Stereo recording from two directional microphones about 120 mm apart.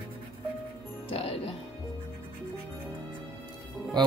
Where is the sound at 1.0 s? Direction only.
55° left (ahead or behind).